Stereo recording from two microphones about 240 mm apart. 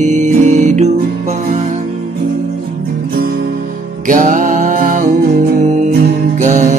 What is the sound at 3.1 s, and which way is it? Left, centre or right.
Music, right.